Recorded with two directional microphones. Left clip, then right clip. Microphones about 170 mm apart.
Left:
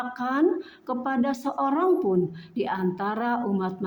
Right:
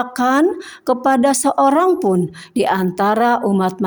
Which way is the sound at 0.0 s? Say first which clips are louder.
Right 9 dB; 50° right (ahead or behind).